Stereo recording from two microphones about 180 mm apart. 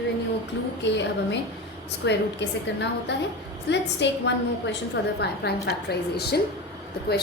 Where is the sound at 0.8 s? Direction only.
80° left.